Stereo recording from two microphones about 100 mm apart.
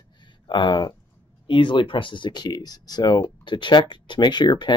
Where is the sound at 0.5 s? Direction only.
50° left (ahead or behind).